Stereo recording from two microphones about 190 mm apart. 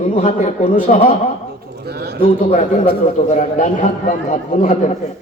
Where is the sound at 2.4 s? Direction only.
40° left (ahead or behind).